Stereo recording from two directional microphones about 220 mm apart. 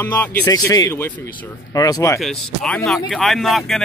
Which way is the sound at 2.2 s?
5° left (ahead or behind).